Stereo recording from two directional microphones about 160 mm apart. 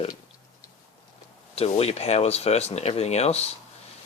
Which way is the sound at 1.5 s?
40° left (ahead or behind).